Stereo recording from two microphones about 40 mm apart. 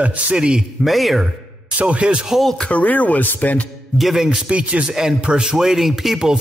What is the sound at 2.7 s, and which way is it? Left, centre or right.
Speech, left.